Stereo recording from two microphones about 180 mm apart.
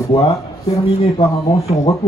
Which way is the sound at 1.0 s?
30° left (ahead or behind).